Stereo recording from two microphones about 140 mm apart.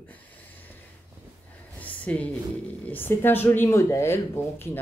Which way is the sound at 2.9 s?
15° left (ahead or behind).